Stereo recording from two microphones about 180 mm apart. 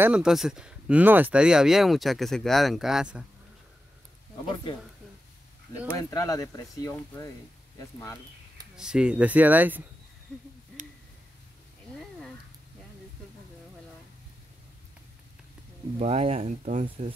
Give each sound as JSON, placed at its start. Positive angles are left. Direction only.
{"t": 0.0, "sound": "speech", "side_deg": -5}
{"t": 5.9, "sound": "speech", "side_deg": 20}
{"t": 8.7, "sound": "speech", "side_deg": -5}
{"t": 16.0, "sound": "speech", "side_deg": -35}
{"t": 16.6, "sound": "speech", "side_deg": -45}